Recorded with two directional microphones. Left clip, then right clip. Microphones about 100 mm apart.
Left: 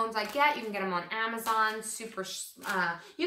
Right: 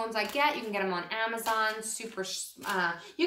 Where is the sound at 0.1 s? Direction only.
35° right (ahead or behind).